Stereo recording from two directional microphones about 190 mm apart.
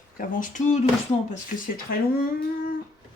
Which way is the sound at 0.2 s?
40° left (ahead or behind).